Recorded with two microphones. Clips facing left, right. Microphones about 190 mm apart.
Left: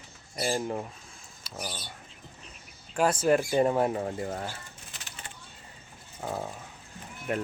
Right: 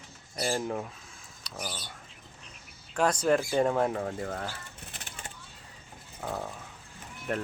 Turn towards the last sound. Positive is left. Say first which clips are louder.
# left 2 dB
turn(degrees=5)  # may be behind; listen again after turning